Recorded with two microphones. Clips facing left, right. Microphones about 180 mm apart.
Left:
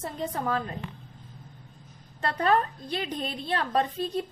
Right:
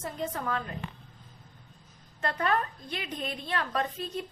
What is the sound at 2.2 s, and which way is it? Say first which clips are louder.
A woman's voice: left 4 dB; 35° left (ahead or behind).